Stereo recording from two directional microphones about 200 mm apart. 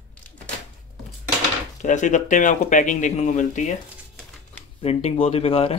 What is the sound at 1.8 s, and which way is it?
Speech, 40° left (ahead or behind).